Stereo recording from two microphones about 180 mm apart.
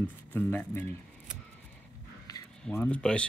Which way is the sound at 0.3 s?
10° left (ahead or behind).